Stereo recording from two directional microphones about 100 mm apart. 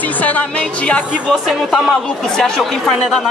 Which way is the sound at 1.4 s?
Centre (ahead or behind).